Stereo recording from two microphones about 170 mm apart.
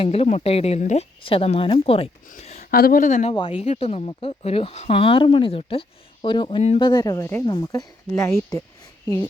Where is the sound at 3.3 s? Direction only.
35° left (ahead or behind).